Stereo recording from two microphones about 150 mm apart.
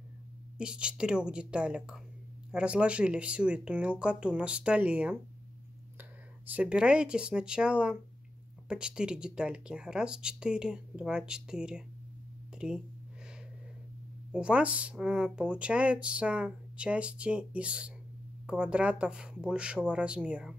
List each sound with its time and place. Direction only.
0.6 s speech: 5° right (ahead or behind)
14.3 s speech: 5° right (ahead or behind)